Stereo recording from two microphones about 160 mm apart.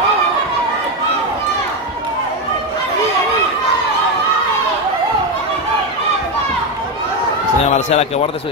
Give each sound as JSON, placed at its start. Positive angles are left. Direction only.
{"t": 7.7, "sound": "speech", "side_deg": 40}